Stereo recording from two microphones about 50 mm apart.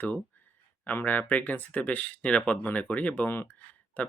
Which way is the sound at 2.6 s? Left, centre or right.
Left.